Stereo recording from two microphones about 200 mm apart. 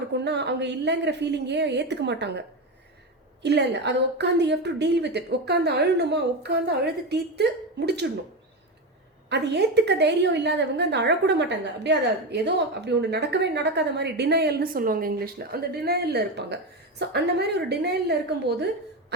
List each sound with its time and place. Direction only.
0.1 s a woman's voice: 60° right (ahead or behind)
3.4 s a woman's voice: 60° right (ahead or behind)
9.3 s a woman's voice: 60° right (ahead or behind)